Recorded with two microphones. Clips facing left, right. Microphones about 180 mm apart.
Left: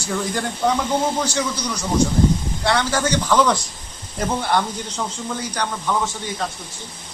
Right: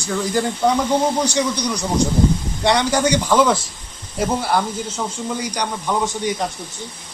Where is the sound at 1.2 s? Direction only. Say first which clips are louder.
Right 4 dB; 15° right (ahead or behind).